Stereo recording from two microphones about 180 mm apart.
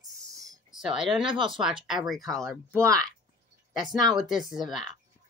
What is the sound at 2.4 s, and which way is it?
Speech, 15° right (ahead or behind).